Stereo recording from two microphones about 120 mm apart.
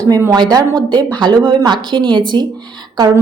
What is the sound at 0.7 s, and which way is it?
Speech, 10° left (ahead or behind).